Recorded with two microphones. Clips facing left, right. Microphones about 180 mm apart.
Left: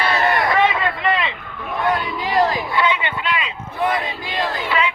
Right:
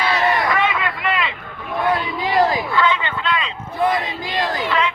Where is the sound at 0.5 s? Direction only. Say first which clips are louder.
Left 3 dB; 25° left (ahead or behind).